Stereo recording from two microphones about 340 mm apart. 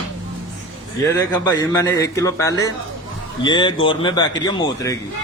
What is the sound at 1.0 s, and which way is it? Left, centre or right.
A man's voice, centre.